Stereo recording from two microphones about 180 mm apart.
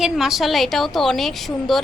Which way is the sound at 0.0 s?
Centre (ahead or behind).